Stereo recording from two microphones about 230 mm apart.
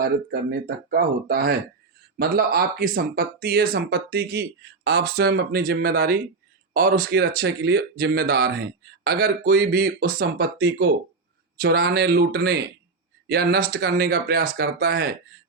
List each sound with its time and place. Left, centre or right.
0.9 s speech: right